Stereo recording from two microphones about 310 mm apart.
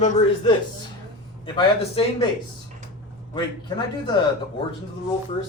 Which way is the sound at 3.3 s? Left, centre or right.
Centre.